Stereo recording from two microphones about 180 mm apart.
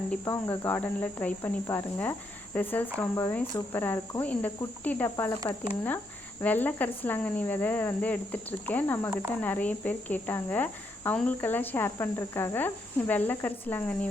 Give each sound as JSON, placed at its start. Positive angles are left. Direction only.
{"t": 0.1, "sound": "speech", "side_deg": 15}
{"t": 5.5, "sound": "speech", "side_deg": 20}
{"t": 6.4, "sound": "speech", "side_deg": 10}